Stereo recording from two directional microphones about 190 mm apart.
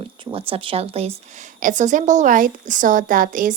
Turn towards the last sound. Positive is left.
turn(degrees=-45)  # may be behind; listen again after turning